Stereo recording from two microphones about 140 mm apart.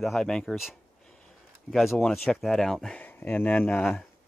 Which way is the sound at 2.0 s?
5° left (ahead or behind).